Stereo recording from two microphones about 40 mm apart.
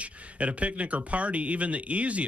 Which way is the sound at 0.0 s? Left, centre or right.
Right.